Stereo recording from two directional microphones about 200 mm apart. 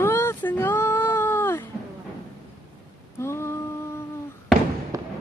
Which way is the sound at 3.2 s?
15° left (ahead or behind).